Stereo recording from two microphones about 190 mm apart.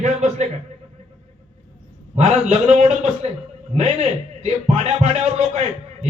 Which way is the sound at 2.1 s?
35° right (ahead or behind).